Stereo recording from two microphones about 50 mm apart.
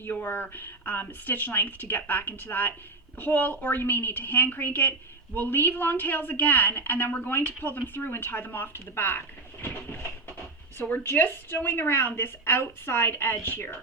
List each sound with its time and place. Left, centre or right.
0.0 s a woman's voice: left
11.0 s a woman's voice: left